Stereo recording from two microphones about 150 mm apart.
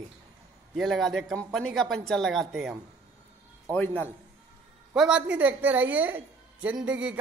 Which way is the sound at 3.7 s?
15° left (ahead or behind).